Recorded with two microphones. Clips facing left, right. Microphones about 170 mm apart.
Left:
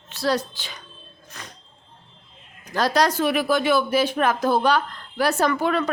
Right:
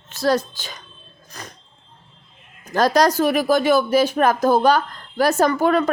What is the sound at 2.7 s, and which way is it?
A woman's voice, 45° right (ahead or behind).